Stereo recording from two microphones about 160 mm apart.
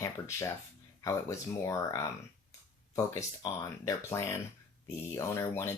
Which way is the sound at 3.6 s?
20° left (ahead or behind).